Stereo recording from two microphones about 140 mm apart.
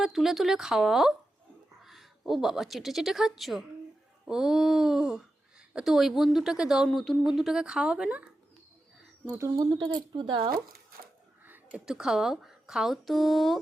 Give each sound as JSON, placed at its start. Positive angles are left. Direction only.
{"t": 0.0, "sound": "speech", "side_deg": 0}
{"t": 9.2, "sound": "speech", "side_deg": -20}
{"t": 11.4, "sound": "a woman's voice", "side_deg": -10}